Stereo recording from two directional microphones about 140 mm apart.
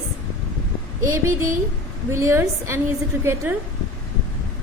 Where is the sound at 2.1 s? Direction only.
20° right (ahead or behind).